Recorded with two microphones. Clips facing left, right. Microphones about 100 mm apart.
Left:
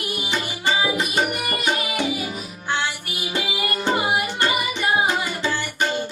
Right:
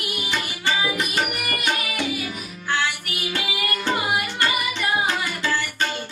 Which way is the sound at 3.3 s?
20° left (ahead or behind).